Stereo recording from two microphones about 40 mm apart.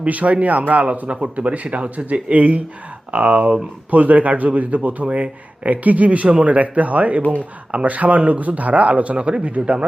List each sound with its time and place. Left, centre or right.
0.0 s speech: right